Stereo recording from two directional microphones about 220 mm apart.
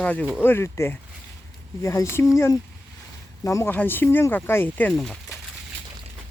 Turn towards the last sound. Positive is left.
turn(degrees=0)  # may be behind; listen again after turning